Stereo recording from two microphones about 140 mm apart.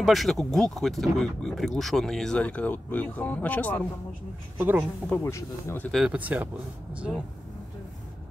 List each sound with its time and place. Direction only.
0.0 s speech: centre (ahead or behind)
4.6 s speech: 15° right (ahead or behind)
5.1 s speech: 20° left (ahead or behind)
5.9 s speech: 5° right (ahead or behind)